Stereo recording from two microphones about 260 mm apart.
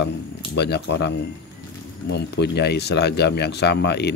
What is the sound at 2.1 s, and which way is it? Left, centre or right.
Speech, left.